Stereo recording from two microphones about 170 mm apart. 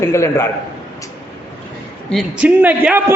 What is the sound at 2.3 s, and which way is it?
Speech, 10° right (ahead or behind).